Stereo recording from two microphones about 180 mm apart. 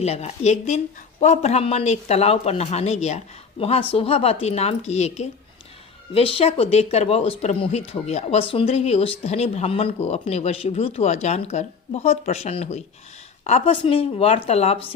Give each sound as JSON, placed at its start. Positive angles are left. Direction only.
{"t": 0.0, "sound": "speech", "side_deg": 35}